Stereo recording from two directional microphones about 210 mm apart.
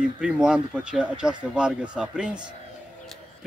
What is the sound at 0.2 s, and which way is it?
Speech, 5° right (ahead or behind).